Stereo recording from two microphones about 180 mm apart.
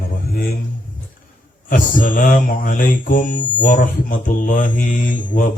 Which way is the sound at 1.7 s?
50° left (ahead or behind).